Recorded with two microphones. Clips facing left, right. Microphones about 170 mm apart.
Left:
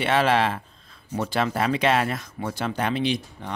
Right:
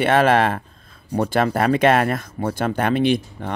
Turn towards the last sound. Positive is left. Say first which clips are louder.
# right 7 dB
turn(degrees=-55)  # may be behind; listen again after turning